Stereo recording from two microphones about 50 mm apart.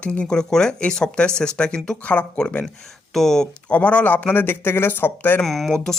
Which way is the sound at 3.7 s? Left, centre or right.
Left.